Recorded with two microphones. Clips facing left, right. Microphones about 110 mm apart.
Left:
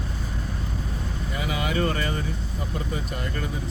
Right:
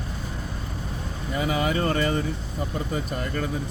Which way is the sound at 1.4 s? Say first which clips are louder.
Right 2 dB; 35° right (ahead or behind).